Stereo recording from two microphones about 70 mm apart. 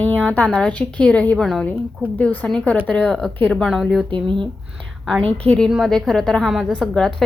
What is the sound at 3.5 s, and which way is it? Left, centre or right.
Speech, centre.